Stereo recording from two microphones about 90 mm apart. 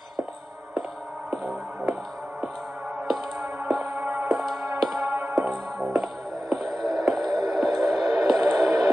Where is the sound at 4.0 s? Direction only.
20° right (ahead or behind).